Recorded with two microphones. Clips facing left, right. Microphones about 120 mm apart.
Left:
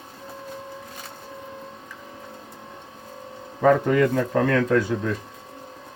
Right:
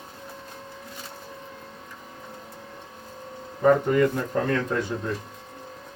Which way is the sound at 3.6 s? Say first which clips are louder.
Left 1 dB; 90° left.